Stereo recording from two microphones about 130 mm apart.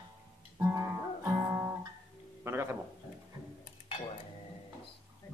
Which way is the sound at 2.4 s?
20° right (ahead or behind).